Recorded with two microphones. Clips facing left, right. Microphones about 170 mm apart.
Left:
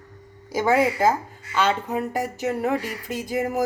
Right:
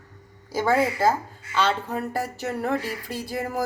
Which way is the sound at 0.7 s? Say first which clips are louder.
Left 2 dB; 15° left (ahead or behind).